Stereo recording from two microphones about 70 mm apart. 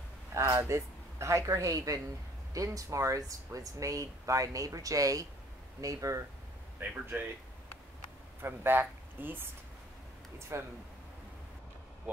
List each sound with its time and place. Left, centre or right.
0.3 s speech: right
6.8 s speech: right
8.4 s speech: right
10.5 s speech: right